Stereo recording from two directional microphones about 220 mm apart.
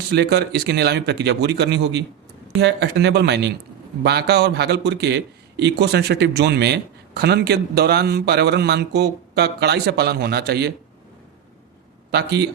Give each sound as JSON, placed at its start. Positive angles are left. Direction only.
{"t": 0.1, "sound": "a man's voice", "side_deg": -50}
{"t": 12.1, "sound": "a man's voice", "side_deg": -50}